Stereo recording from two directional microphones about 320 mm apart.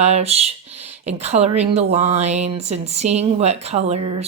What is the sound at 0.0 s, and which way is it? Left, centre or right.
Speech, centre.